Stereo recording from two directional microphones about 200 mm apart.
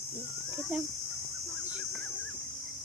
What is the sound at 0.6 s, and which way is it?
Speech, centre (ahead or behind).